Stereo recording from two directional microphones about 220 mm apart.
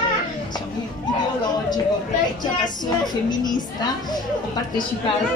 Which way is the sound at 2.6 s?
20° left (ahead or behind).